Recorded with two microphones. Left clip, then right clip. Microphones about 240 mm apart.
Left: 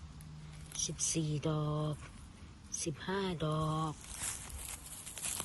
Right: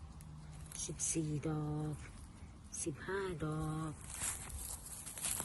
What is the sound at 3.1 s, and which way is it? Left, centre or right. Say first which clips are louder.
Mantra: left 4 dB; left.